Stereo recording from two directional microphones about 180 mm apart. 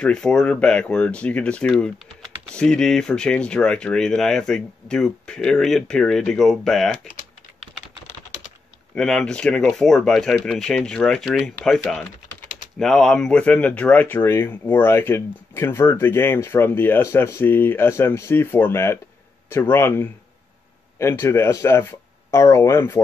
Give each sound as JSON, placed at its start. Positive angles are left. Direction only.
{"t": 0.0, "sound": "speech", "side_deg": 5}
{"t": 8.9, "sound": "speech", "side_deg": 5}